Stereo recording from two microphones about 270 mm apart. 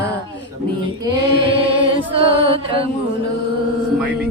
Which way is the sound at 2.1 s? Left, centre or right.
Centre.